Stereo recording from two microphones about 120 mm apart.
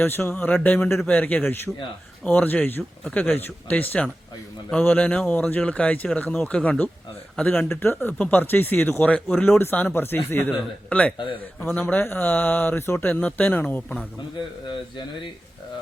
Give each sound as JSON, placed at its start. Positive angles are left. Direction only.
{"t": 0.0, "sound": "speech", "side_deg": 20}